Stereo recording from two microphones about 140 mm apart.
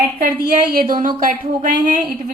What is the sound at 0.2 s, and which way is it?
A woman's voice, 85° right.